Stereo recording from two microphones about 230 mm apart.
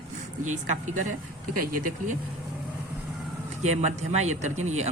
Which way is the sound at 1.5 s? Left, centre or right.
Right.